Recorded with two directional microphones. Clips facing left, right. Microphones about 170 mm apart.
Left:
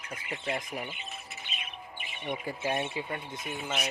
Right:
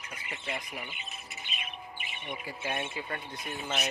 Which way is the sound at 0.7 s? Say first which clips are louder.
Left 4 dB; 40° left (ahead or behind).